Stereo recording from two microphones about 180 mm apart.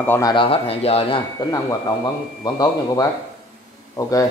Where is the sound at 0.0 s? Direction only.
10° left (ahead or behind).